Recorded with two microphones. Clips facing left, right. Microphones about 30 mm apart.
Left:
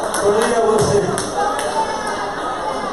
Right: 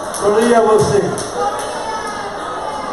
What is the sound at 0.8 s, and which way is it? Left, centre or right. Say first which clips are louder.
Speech: right 1 dB; centre.